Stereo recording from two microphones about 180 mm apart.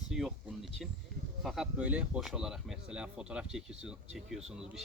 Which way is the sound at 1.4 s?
Centre (ahead or behind).